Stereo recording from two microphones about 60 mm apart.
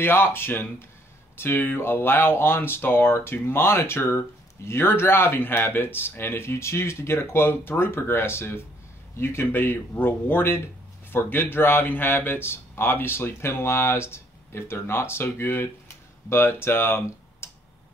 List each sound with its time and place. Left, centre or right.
0.0 s speech: left
17.4 s tick-tock: left